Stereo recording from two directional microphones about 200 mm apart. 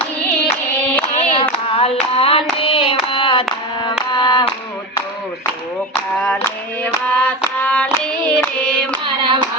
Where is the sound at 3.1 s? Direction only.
25° left (ahead or behind).